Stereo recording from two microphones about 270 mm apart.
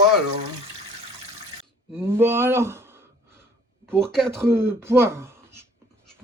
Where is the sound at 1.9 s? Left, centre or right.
Centre.